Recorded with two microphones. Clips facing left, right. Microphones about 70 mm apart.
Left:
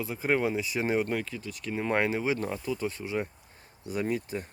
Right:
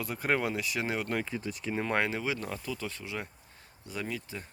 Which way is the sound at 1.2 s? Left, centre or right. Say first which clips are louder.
Right 3 dB; right.